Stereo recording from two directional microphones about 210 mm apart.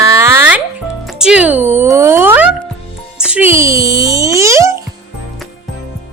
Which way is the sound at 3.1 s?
5° right (ahead or behind).